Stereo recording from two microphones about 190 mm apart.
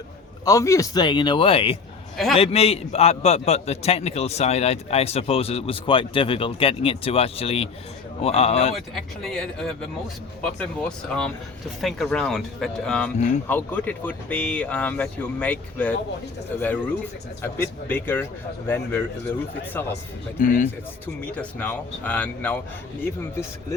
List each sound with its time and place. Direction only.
0.4 s speech: 15° left (ahead or behind)
2.1 s a man's voice: centre (ahead or behind)
2.4 s a man's voice: 30° left (ahead or behind)
8.7 s speech: centre (ahead or behind)
20.4 s speech: 45° left (ahead or behind)
21.3 s speech: 5° left (ahead or behind)